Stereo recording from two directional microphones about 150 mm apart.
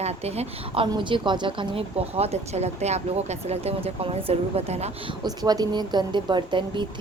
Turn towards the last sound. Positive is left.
turn(degrees=-30)  # may be behind; listen again after turning